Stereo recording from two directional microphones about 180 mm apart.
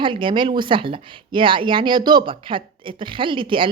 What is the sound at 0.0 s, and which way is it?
Speech, 30° right (ahead or behind).